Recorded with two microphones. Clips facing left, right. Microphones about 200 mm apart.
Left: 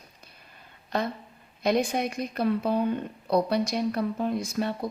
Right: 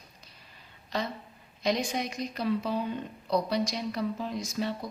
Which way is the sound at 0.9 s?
55° left (ahead or behind).